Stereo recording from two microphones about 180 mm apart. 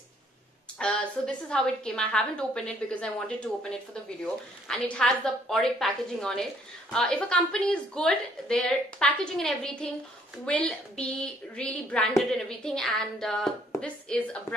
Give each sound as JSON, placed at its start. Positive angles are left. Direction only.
{"t": 0.7, "sound": "a woman's voice", "side_deg": 5}